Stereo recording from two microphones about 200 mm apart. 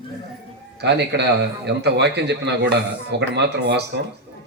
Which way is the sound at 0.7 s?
55° right (ahead or behind).